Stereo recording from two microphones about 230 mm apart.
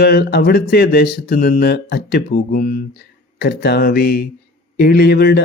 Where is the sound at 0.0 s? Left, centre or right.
Left.